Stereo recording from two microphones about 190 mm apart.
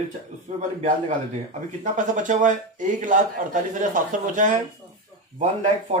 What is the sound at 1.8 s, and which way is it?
Speech, 40° right (ahead or behind).